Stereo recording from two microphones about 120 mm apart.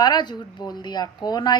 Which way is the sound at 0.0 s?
35° left (ahead or behind).